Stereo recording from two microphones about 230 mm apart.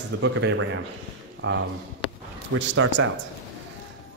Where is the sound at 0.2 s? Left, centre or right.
Right.